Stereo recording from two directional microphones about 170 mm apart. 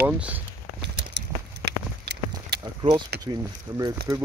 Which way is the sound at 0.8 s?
75° right (ahead or behind).